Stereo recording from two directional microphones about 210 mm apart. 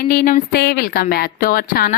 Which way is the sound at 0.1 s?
40° left (ahead or behind).